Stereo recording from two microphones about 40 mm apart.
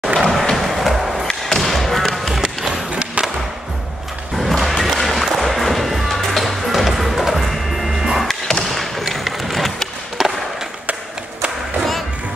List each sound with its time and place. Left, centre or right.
0.0 s a sound: centre
0.6 s music: centre
1.6 s thump: centre
2.7 s skateboard: right
4.4 s music: centre
8.3 s music: centre
8.6 s skateboard: centre